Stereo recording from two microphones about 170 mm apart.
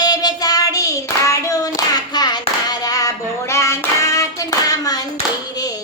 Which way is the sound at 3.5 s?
15° left (ahead or behind).